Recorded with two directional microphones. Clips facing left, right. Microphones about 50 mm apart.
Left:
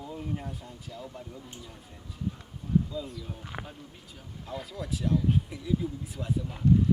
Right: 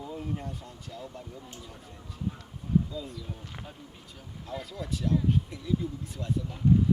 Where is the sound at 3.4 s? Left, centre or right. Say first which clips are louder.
Left 4 dB; centre.